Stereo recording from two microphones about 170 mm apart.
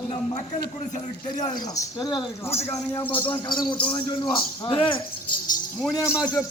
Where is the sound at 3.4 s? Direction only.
25° left (ahead or behind).